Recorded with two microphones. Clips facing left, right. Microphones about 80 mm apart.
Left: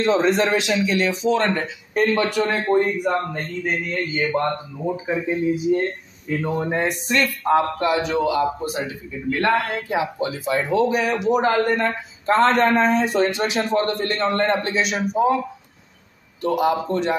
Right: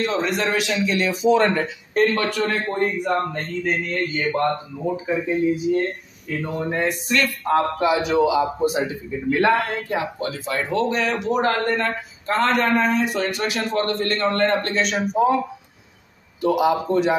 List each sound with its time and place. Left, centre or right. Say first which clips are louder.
0.0 s a man's voice: left 4 dB; left
0.8 s speech: right 1 dB; centre
2.1 s a man's voice: left 2 dB; left
3.1 s speech: even; centre
4.9 s a man's voice: right 1 dB; centre
7.4 s a man's voice: even; centre
8.6 s a man's voice: right 5 dB; right
9.4 s speech: right 1 dB; centre
9.8 s speech: left 2 dB; centre
12.3 s a man's voice: left 3 dB; left; by 17.1 s centre